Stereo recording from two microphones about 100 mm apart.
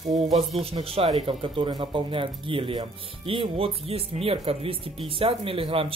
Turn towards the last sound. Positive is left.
turn(degrees=-65)  # may be behind; listen again after turning